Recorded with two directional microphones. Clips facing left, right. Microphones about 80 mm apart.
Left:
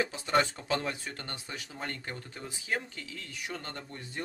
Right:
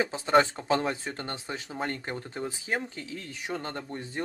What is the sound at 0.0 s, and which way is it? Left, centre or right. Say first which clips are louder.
Speech: right 5 dB; right.